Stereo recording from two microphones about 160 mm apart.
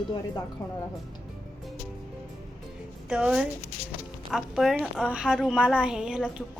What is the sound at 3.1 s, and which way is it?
A woman's voice, 5° right (ahead or behind).